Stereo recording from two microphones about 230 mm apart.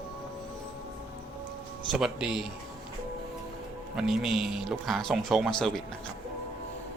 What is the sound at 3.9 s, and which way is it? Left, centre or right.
Speech, centre.